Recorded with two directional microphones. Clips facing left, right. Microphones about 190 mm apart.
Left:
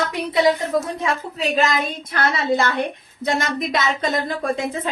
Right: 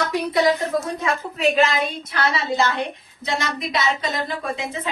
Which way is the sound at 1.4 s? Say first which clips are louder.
Right 2 dB; 40° left (ahead or behind).